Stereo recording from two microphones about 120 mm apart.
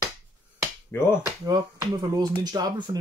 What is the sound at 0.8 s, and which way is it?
Speech, 20° left (ahead or behind).